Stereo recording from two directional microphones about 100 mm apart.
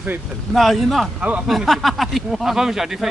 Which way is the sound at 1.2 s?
15° right (ahead or behind).